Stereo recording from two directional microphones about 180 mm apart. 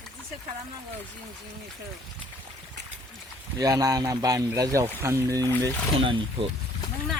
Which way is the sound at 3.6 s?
20° right (ahead or behind).